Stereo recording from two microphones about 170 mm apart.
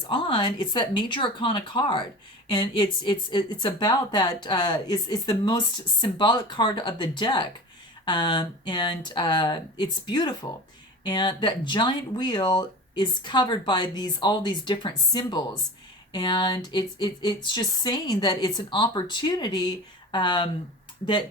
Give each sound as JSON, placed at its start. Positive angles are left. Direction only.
{"t": 0.1, "sound": "speech", "side_deg": 30}